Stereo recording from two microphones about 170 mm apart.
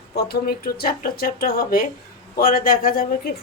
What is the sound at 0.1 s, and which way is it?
Speech, 70° left (ahead or behind).